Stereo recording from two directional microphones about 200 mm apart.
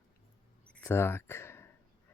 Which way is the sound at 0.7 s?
10° left (ahead or behind).